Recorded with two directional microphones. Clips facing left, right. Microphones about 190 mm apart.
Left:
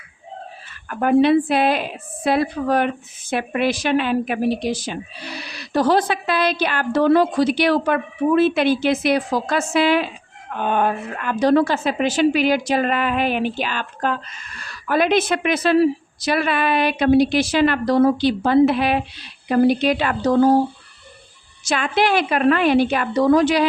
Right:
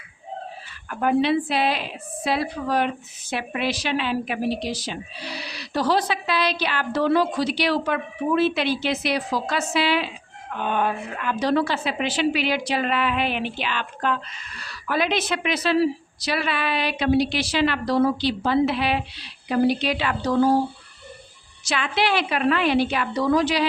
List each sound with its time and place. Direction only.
0.9 s a woman's voice: 50° left (ahead or behind)
21.7 s a woman's voice: 45° left (ahead or behind)